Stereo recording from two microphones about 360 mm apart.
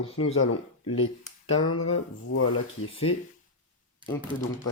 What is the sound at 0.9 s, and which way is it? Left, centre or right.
Speech, left.